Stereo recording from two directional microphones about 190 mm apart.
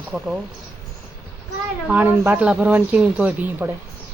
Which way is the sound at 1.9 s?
10° right (ahead or behind).